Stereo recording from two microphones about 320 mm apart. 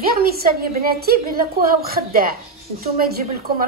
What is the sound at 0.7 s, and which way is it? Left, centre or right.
Speech, right.